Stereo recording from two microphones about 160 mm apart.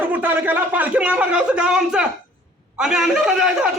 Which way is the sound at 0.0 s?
10° right (ahead or behind).